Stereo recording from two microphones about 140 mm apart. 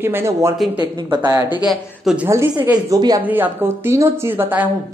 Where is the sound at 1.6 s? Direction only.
5° right (ahead or behind).